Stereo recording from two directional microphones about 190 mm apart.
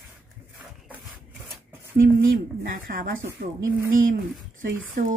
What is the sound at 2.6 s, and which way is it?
Speech, 50° right (ahead or behind).